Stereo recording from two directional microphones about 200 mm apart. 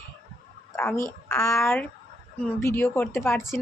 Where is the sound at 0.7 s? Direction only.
10° left (ahead or behind).